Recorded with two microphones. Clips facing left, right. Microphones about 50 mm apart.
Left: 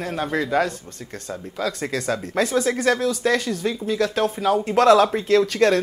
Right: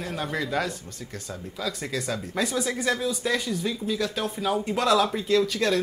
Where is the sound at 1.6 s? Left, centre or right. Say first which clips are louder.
Left 5 dB; left.